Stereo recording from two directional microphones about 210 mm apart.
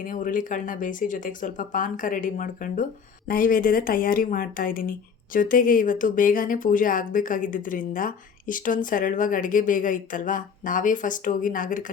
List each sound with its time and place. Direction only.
0.0 s speech: 40° left (ahead or behind)